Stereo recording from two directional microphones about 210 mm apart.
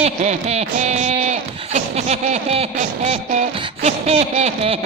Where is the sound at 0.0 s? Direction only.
30° right (ahead or behind).